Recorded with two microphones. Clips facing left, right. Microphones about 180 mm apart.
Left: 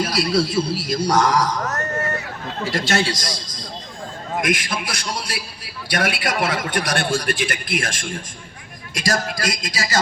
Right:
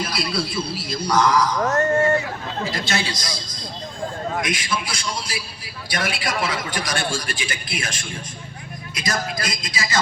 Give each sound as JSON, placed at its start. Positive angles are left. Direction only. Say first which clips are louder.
{"t": 0.0, "sound": "music", "louder": "left 6 dB", "side_deg": 40}
{"t": 1.6, "sound": "a sound", "louder": "right 7 dB", "side_deg": -30}
{"t": 2.7, "sound": "a man's voice", "louder": "left 5 dB", "side_deg": 45}
{"t": 4.4, "sound": "a man's voice", "louder": "left 3 dB", "side_deg": 55}
{"t": 9.0, "sound": "music", "louder": "left 3 dB", "side_deg": 40}